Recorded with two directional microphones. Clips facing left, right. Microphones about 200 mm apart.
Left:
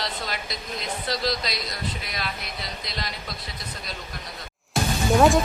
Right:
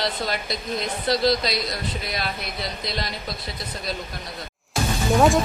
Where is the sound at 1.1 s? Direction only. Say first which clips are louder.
Right 7 dB; 30° right (ahead or behind).